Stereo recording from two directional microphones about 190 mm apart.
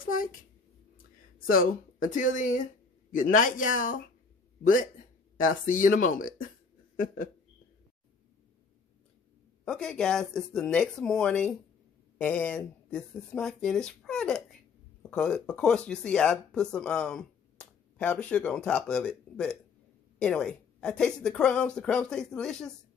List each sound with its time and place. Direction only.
0.0 s speech: 45° left (ahead or behind)
1.5 s speech: 45° left (ahead or behind)
5.4 s speech: 45° left (ahead or behind)
9.7 s speech: 5° left (ahead or behind)